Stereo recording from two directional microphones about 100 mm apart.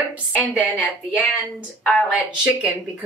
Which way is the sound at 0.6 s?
15° left (ahead or behind).